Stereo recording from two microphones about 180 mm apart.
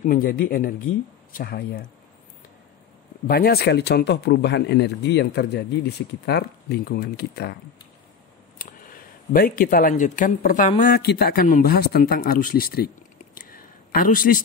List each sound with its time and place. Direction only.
0.0 s a man's voice: 50° left (ahead or behind)
3.3 s a man's voice: 55° left (ahead or behind)
8.5 s speech: 50° left (ahead or behind)
11.1 s a man's voice: 60° left (ahead or behind)
13.4 s a sound: 50° left (ahead or behind)